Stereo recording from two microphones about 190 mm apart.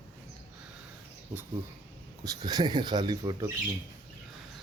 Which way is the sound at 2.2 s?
20° right (ahead or behind).